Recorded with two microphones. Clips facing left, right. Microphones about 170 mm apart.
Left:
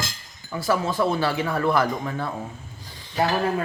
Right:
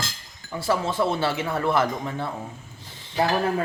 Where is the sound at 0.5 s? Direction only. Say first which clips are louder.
Left 1 dB; 25° right (ahead or behind).